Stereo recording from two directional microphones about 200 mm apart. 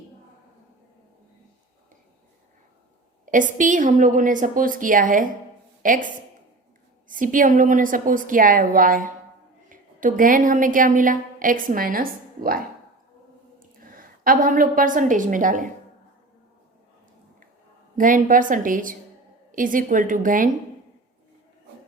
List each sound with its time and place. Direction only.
3.3 s a woman's voice: 40° right (ahead or behind)
17.9 s a woman's voice: 40° right (ahead or behind)